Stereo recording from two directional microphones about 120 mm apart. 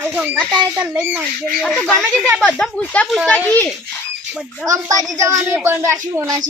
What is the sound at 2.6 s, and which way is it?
A child's voice, 10° left (ahead or behind).